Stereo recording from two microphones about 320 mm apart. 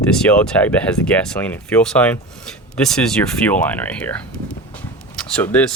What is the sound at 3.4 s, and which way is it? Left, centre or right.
Speech, centre.